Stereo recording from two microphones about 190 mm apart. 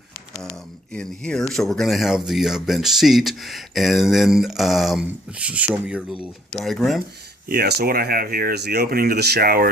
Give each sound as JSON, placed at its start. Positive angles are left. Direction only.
{"t": 0.9, "sound": "speech", "side_deg": 5}
{"t": 7.4, "sound": "speech", "side_deg": -55}